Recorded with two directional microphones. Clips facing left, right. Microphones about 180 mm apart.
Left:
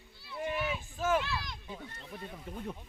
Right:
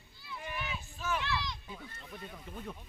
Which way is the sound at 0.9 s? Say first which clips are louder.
Left 7 dB; 45° left (ahead or behind).